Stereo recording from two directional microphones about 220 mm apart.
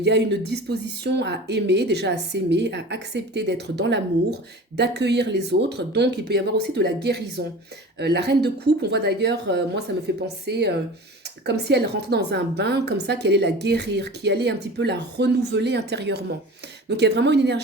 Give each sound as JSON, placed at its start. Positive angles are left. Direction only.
{"t": 0.0, "sound": "a woman's voice", "side_deg": -50}